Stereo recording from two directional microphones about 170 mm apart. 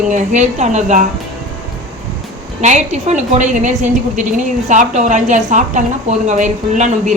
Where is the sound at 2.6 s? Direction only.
45° right (ahead or behind).